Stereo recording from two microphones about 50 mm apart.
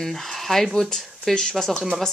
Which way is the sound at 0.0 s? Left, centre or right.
Centre.